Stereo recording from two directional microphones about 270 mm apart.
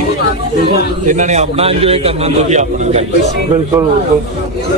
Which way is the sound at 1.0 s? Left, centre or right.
Right.